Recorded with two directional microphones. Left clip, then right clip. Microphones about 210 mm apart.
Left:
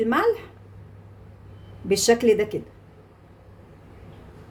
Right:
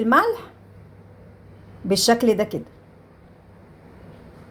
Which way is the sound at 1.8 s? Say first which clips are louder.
Even; 20° right (ahead or behind).